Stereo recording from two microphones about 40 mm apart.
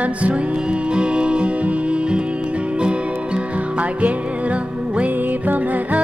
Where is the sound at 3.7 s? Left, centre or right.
Right.